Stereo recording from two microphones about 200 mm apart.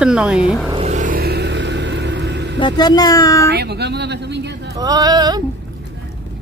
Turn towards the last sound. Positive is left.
turn(degrees=-20)  # may be behind; listen again after turning